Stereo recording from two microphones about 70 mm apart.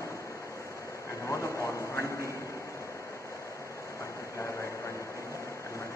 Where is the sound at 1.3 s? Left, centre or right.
Left.